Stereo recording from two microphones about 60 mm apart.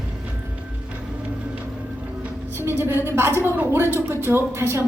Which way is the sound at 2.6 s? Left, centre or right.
Right.